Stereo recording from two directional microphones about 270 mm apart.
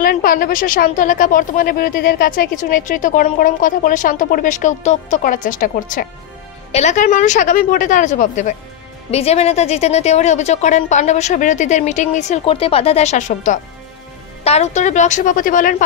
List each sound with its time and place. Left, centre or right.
0.0 s a woman's voice: left